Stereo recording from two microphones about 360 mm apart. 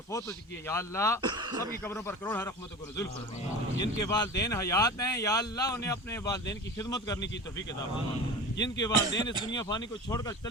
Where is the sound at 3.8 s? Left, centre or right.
Centre.